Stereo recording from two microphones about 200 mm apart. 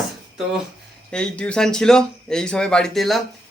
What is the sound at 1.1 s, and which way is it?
Speech, 5° left (ahead or behind).